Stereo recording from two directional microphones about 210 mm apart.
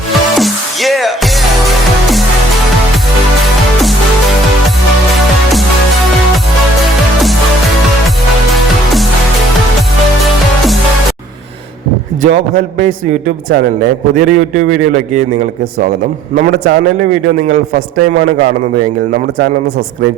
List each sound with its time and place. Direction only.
0.3 s music: centre (ahead or behind)
12.3 s a man's voice: 45° right (ahead or behind)
16.3 s a man's voice: 45° right (ahead or behind)